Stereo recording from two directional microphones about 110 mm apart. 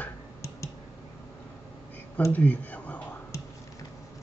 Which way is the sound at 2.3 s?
15° left (ahead or behind).